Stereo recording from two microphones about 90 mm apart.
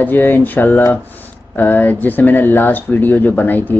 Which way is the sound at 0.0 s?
20° left (ahead or behind).